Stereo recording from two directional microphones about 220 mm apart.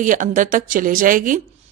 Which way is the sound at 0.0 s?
35° right (ahead or behind).